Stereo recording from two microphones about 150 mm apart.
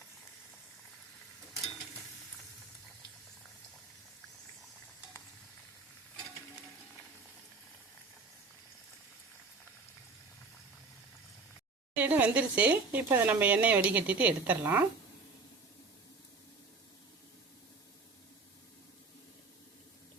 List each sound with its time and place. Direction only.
11.9 s speech: 10° right (ahead or behind)